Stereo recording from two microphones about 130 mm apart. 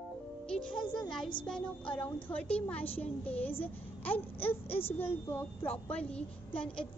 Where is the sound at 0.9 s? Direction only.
5° left (ahead or behind).